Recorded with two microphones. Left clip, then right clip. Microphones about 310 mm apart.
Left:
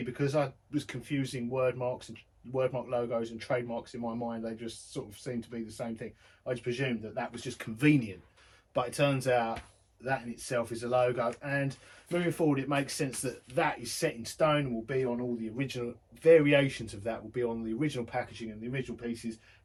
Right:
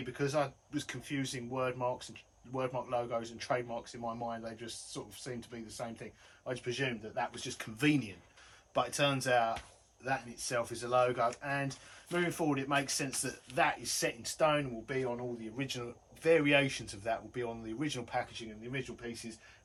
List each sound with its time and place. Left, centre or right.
0.1 s speech: centre